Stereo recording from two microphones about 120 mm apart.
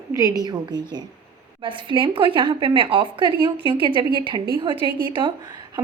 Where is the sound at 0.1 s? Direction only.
30° right (ahead or behind).